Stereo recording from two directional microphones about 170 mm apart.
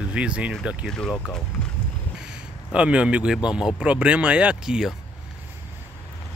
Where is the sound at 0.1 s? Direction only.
5° right (ahead or behind).